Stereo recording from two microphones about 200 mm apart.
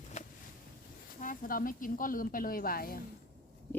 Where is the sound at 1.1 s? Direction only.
45° left (ahead or behind).